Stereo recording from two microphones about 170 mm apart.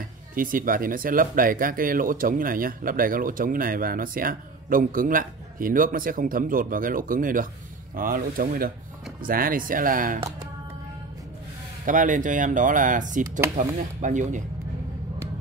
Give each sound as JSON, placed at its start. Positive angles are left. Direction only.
{"t": 0.3, "sound": "speech", "side_deg": -55}
{"t": 11.8, "sound": "speech", "side_deg": -50}